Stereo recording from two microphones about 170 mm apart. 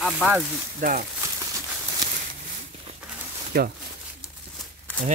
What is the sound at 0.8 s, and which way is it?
Speech, 55° right (ahead or behind).